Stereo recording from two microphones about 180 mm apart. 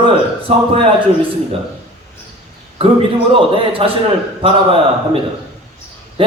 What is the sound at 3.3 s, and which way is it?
A man's voice, 30° right (ahead or behind).